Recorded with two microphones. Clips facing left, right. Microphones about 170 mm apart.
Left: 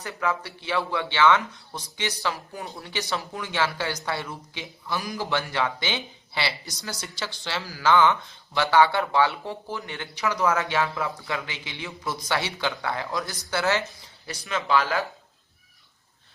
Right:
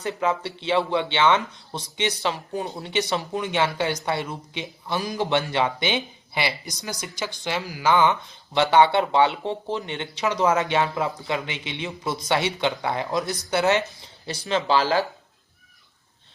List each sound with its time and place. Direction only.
0.0 s speech: 20° right (ahead or behind)